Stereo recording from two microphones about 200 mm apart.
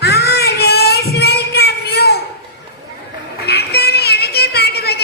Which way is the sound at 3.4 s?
55° left (ahead or behind).